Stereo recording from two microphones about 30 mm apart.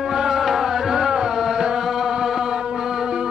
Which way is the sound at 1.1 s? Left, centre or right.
Centre.